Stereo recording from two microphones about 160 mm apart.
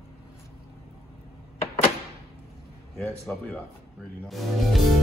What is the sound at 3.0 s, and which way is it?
Speech, 10° left (ahead or behind).